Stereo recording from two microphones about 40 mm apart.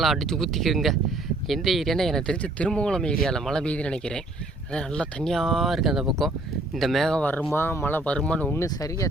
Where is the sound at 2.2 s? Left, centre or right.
Left.